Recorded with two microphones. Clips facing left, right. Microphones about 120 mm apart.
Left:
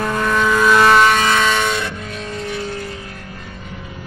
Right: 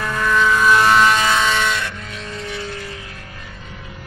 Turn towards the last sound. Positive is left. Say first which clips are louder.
# left 4 dB
turn(degrees=45)  # may be behind; listen again after turning